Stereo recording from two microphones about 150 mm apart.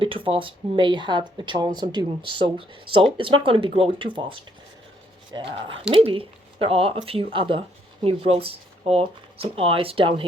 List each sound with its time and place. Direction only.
0.0 s speech: 35° right (ahead or behind)